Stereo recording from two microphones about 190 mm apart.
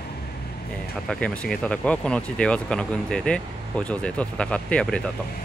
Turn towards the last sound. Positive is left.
turn(degrees=5)  # may be behind; listen again after turning